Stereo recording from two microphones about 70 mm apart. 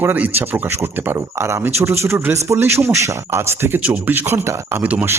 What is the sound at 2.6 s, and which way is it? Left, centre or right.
Speech, right.